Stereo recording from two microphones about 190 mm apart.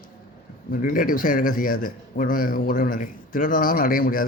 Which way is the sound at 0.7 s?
45° left (ahead or behind).